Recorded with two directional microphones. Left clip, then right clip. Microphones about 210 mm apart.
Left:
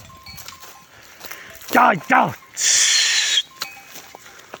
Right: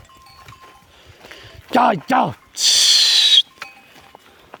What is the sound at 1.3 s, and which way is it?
Music, 35° right (ahead or behind).